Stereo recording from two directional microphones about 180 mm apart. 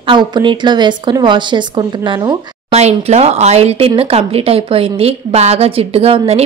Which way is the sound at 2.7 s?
35° right (ahead or behind).